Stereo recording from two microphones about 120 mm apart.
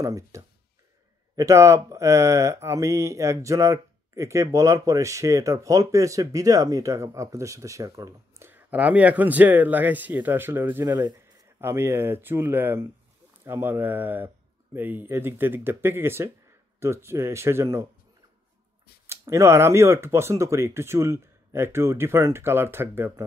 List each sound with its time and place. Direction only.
0.0 s speech: 25° right (ahead or behind)
8.5 s speech: 15° right (ahead or behind)
19.0 s speech: 25° right (ahead or behind)